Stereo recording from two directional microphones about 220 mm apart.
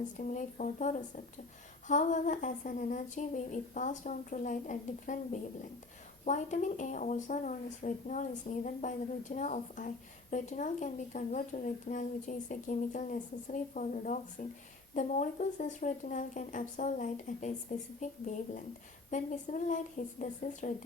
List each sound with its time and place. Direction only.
0.2 s speech: 35° left (ahead or behind)